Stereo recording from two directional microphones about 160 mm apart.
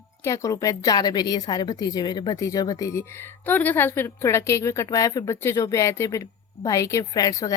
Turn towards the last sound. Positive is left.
turn(degrees=20)  # may be behind; listen again after turning